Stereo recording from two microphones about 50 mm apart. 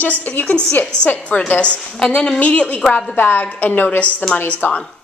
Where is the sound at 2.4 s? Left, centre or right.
Left.